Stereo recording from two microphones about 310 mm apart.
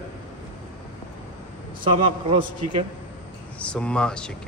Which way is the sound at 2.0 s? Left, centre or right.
Centre.